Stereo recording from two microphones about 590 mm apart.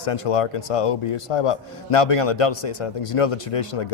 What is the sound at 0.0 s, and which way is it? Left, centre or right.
A man's voice, left.